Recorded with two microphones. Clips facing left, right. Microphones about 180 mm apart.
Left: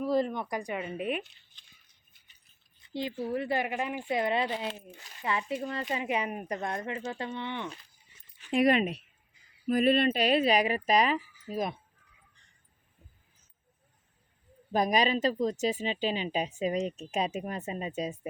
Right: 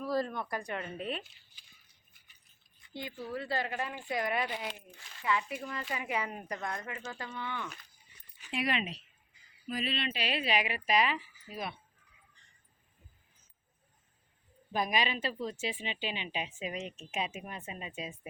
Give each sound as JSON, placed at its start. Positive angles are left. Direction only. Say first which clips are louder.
{"t": 0.0, "sound": "speech", "louder": "left 5 dB", "side_deg": 20}
{"t": 3.0, "sound": "a woman's voice", "louder": "left 7 dB", "side_deg": 30}
{"t": 8.4, "sound": "speech", "louder": "left 9 dB", "side_deg": 45}
{"t": 14.7, "sound": "speech", "louder": "left 6 dB", "side_deg": 40}